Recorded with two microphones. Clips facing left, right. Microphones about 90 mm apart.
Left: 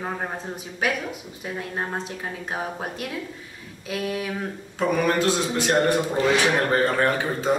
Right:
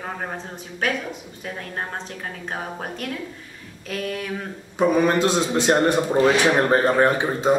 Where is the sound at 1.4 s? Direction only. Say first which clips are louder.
Left 2 dB; 5° left (ahead or behind).